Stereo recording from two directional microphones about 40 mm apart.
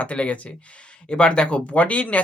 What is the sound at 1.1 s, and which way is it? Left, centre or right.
Speech, left.